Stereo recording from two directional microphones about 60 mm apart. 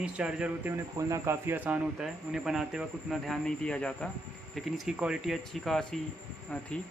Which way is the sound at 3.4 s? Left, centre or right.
Centre.